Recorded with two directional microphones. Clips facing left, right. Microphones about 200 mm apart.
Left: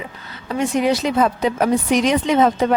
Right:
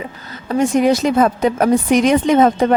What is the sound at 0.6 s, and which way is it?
Speech, 45° right (ahead or behind).